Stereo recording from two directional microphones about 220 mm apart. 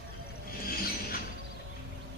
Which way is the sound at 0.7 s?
40° left (ahead or behind).